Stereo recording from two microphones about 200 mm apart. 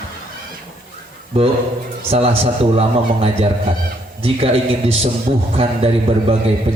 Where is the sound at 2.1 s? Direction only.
30° right (ahead or behind).